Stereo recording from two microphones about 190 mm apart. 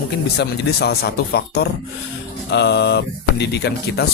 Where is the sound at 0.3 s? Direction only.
60° left (ahead or behind).